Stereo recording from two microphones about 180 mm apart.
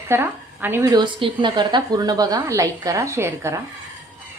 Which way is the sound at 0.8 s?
25° right (ahead or behind).